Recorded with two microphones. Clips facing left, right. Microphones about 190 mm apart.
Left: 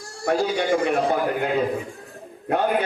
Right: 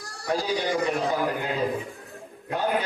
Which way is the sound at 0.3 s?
55° left (ahead or behind).